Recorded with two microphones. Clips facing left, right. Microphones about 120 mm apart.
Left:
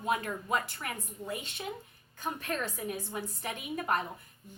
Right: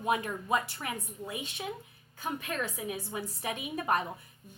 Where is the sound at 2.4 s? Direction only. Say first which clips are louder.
Even; 5° right (ahead or behind).